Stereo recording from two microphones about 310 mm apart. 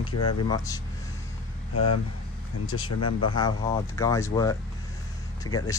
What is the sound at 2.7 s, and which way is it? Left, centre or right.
Speech, left.